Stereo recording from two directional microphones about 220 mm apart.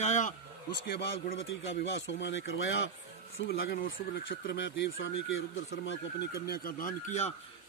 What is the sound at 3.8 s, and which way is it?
Speech, 55° left (ahead or behind).